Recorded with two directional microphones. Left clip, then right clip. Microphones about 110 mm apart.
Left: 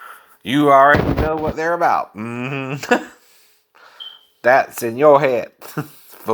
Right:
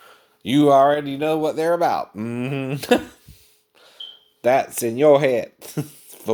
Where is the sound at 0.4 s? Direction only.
50° right (ahead or behind).